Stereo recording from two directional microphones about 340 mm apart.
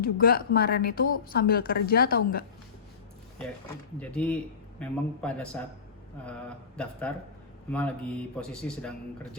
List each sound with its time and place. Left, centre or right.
0.0 s speech: left
3.9 s speech: centre
7.1 s speech: centre